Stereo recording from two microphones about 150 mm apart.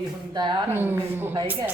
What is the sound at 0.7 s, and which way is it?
A woman's voice, 15° right (ahead or behind).